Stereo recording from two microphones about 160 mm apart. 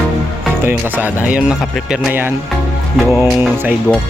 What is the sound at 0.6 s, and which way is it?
Music, 15° right (ahead or behind).